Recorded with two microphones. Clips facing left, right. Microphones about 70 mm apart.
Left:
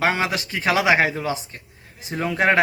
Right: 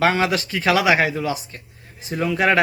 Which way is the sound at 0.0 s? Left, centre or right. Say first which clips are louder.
Right 3 dB; centre.